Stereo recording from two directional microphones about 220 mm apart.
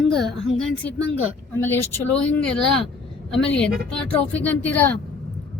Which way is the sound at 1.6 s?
10° left (ahead or behind).